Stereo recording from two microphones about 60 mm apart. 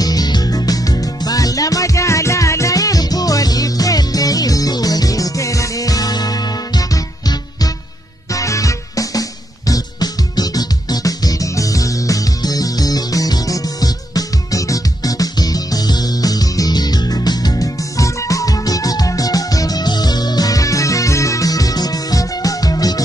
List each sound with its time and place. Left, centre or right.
0.0 s music: left
8.3 s music: left
9.7 s music: left